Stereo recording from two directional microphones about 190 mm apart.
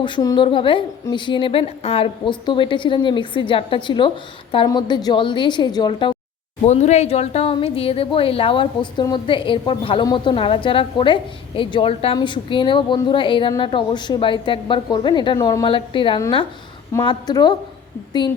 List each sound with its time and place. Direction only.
0.0 s a woman's voice: 20° left (ahead or behind)
6.7 s a woman's voice: 35° left (ahead or behind); by 17.5 s 20° left (ahead or behind)